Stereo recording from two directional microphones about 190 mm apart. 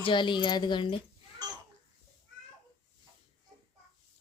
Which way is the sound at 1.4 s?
20° right (ahead or behind).